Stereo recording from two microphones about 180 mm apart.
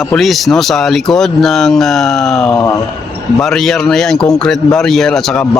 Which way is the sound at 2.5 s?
20° left (ahead or behind).